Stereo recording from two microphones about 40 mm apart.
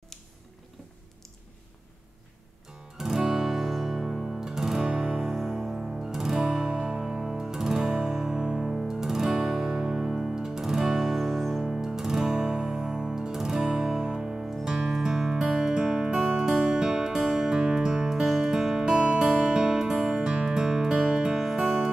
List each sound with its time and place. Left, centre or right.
3.0 s music: centre
4.8 s music: right
5.3 s music: centre
8.4 s music: right
8.8 s music: centre
11.6 s music: centre
18.2 s music: centre
18.5 s music: centre